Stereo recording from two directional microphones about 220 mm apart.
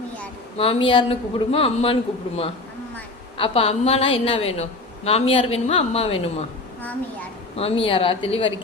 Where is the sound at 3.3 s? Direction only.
25° left (ahead or behind).